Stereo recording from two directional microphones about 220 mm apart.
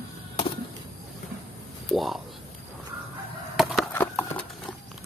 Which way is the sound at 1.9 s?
Centre (ahead or behind).